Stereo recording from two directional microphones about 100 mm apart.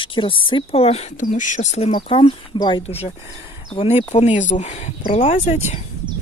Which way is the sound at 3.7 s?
90° left.